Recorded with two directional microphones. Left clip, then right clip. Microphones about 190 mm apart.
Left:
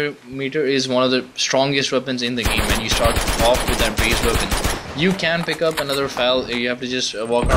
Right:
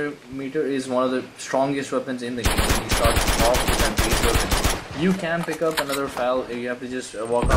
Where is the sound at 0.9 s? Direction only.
35° left (ahead or behind).